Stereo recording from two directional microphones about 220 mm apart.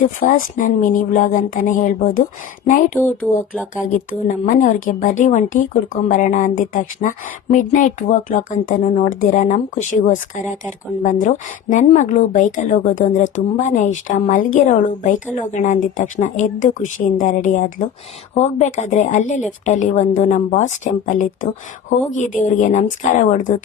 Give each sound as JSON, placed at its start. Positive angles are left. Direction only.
{"t": 0.3, "sound": "speech", "side_deg": 35}
{"t": 3.0, "sound": "speech", "side_deg": 5}
{"t": 4.4, "sound": "speech", "side_deg": 40}